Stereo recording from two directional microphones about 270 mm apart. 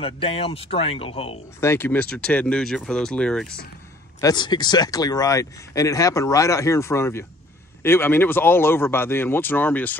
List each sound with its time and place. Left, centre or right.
0.0 s speech: left
1.6 s speech: centre
4.2 s speech: centre